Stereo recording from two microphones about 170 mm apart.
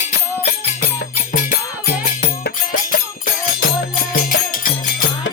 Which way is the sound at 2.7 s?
50° left (ahead or behind).